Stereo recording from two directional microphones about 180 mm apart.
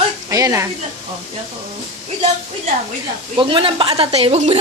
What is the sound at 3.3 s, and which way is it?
Speech, 30° right (ahead or behind).